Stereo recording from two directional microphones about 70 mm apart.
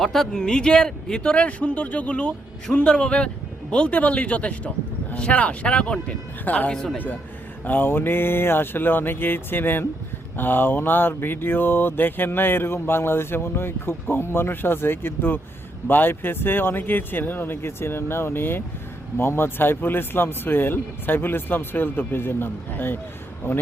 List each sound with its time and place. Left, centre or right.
0.0 s speech: centre; by 7.2 s left
7.6 s mantra: left